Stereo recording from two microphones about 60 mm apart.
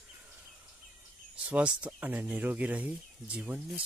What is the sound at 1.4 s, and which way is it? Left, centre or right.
Speech, centre.